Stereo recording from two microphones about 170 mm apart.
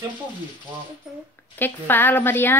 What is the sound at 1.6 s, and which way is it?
Speech, 10° left (ahead or behind).